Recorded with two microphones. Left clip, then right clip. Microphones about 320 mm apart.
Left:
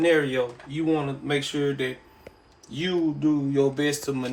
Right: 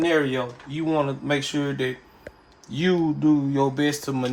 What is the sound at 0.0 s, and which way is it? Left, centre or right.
Speech, right.